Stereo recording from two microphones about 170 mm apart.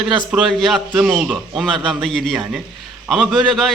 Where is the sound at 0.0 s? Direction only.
5° left (ahead or behind).